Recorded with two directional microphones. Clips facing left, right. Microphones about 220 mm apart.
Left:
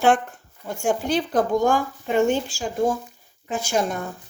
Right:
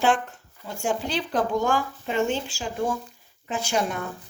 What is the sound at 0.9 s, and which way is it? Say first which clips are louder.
Speech: left 5 dB; 50° left (ahead or behind).